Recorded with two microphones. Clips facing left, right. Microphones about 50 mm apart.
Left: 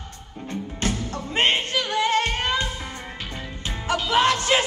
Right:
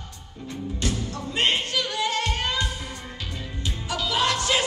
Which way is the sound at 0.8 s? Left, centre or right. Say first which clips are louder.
Left 3 dB; left.